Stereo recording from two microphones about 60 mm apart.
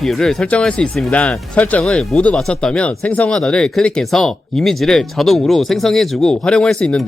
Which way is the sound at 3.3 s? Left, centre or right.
Centre.